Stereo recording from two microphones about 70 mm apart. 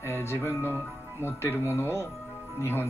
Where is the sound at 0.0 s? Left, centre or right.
Left.